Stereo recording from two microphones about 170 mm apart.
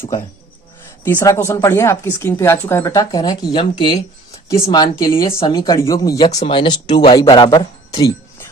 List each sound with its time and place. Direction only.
1.0 s speech: 15° left (ahead or behind)